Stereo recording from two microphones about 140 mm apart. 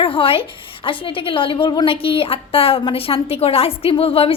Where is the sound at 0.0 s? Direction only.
40° left (ahead or behind).